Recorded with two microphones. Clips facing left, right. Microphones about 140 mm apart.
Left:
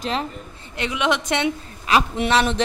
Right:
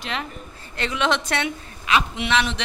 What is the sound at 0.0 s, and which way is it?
Speech, 35° left (ahead or behind).